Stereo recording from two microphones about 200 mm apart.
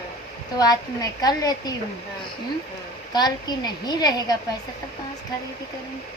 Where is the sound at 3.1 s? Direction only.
20° left (ahead or behind).